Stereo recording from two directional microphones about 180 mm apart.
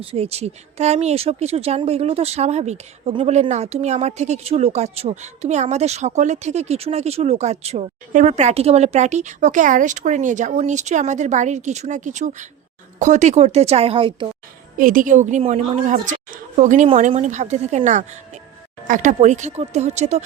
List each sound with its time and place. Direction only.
0.0 s speech: 35° right (ahead or behind)
14.8 s a woman's voice: 50° right (ahead or behind)